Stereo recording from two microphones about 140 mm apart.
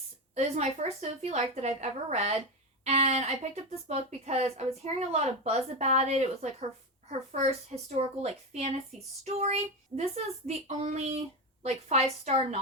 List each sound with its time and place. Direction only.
0.3 s speech: 55° right (ahead or behind)